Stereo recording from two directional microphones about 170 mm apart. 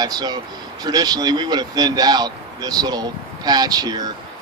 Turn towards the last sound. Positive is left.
turn(degrees=-25)  # may be behind; listen again after turning